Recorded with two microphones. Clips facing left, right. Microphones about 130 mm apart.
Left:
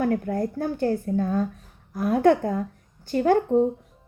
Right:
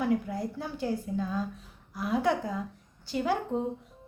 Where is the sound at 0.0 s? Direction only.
55° left (ahead or behind).